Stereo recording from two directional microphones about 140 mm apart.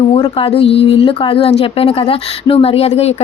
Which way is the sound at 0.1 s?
45° left (ahead or behind).